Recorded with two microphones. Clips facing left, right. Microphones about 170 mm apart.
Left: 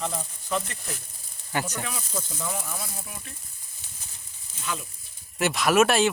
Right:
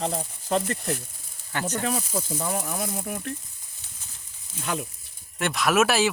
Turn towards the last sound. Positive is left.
turn(degrees=0)  # may be behind; listen again after turning